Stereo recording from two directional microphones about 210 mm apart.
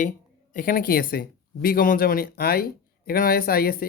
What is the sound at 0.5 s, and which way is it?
Speech, 40° left (ahead or behind).